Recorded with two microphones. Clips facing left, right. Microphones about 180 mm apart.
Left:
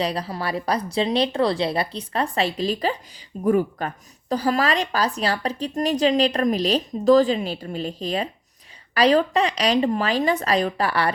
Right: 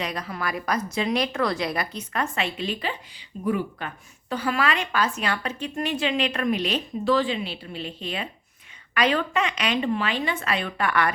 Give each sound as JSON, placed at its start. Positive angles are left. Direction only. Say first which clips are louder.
{"t": 0.0, "sound": "a woman's voice", "louder": "left 5 dB", "side_deg": 30}